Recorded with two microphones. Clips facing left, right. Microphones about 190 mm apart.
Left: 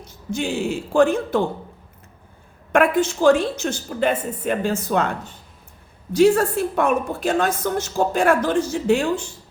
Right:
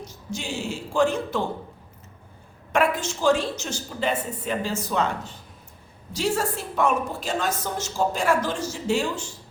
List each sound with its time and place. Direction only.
0.3 s a woman's voice: 55° left (ahead or behind)
2.7 s a woman's voice: 55° left (ahead or behind)
6.1 s a woman's voice: 55° left (ahead or behind)